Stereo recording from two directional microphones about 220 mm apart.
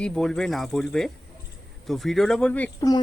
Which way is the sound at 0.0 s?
Centre (ahead or behind).